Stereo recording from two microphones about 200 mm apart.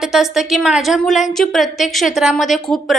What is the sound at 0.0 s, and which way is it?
A woman's voice, centre (ahead or behind).